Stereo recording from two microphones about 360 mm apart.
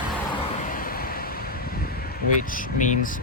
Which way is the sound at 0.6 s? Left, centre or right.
Left.